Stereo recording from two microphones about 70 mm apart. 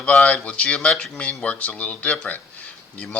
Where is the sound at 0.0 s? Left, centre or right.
Centre.